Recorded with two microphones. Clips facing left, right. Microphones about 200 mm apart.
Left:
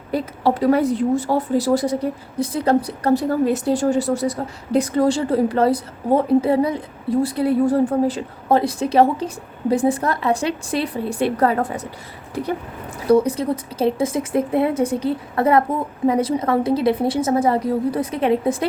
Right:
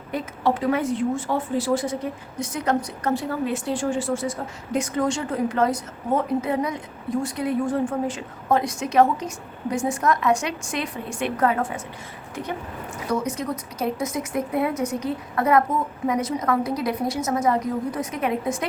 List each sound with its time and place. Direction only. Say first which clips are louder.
0.1 s speech: left 4 dB; 35° left (ahead or behind)